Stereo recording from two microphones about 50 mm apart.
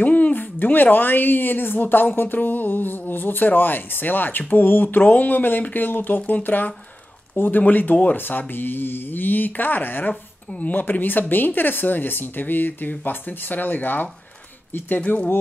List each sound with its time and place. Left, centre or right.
0.0 s speech: left
15.0 s speech: left